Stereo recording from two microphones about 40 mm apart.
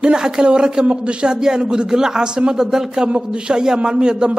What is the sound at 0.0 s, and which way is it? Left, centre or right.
A man's voice, right.